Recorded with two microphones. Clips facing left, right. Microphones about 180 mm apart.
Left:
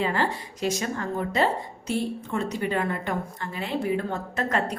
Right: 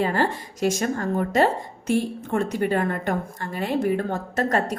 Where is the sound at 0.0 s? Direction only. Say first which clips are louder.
Right 3 dB; 45° right (ahead or behind).